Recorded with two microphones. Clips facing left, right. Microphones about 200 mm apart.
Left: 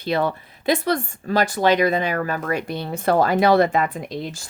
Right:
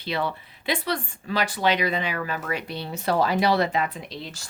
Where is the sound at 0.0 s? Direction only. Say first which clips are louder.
Left 6 dB; 45° left (ahead or behind).